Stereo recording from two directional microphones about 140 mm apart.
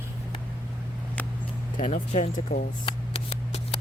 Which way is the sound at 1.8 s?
60° left (ahead or behind).